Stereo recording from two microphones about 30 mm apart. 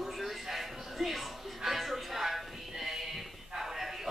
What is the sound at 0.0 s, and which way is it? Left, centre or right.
Music, centre.